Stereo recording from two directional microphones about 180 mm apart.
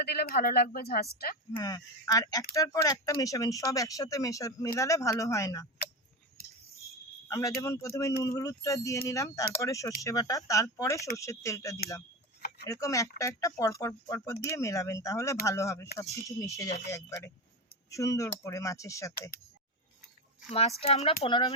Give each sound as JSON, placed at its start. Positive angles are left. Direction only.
{"t": 0.0, "sound": "speech", "side_deg": 55}
{"t": 1.5, "sound": "speech", "side_deg": 20}
{"t": 7.3, "sound": "speech", "side_deg": 20}
{"t": 12.4, "sound": "a sound", "side_deg": 60}
{"t": 12.6, "sound": "speech", "side_deg": 15}
{"t": 20.5, "sound": "speech", "side_deg": 35}
{"t": 21.2, "sound": "speech", "side_deg": 25}